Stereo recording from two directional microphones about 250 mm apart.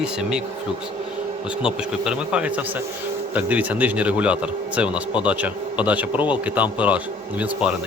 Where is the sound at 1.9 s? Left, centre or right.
Centre.